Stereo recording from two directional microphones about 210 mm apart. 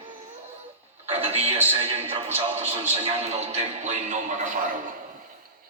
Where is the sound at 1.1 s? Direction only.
30° right (ahead or behind).